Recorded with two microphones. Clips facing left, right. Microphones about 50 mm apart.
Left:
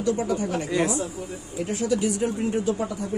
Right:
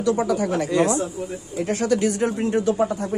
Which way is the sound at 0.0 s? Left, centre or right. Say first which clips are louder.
Right 4 dB; right.